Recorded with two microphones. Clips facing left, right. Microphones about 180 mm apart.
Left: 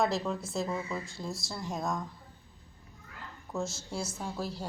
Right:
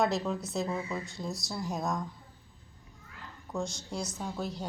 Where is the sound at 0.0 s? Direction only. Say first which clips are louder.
Right 1 dB; centre (ahead or behind).